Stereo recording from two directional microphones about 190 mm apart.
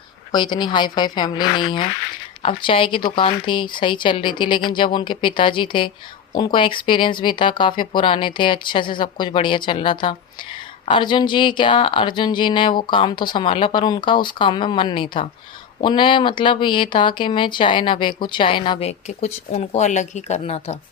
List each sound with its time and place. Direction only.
0.3 s speech: 25° left (ahead or behind)